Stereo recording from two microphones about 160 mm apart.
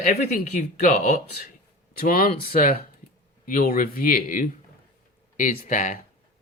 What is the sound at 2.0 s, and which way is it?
Speech, 65° left (ahead or behind).